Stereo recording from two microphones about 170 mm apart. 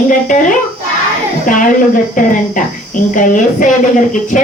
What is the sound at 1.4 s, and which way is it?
Speech, 50° left (ahead or behind).